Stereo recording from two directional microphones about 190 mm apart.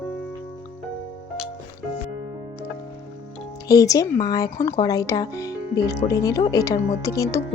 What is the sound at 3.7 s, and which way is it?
Speech, 20° left (ahead or behind).